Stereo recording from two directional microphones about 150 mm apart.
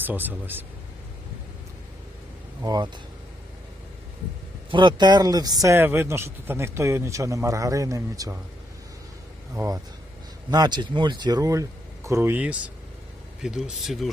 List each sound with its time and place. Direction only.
0.0 s speech: 10° right (ahead or behind)
2.6 s speech: 25° right (ahead or behind)
4.7 s speech: 30° right (ahead or behind)
9.6 s speech: 20° right (ahead or behind); by 14.1 s centre (ahead or behind)